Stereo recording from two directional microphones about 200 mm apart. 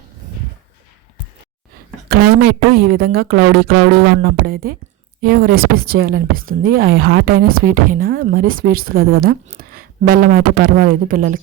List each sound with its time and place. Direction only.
2.0 s speech: 50° right (ahead or behind)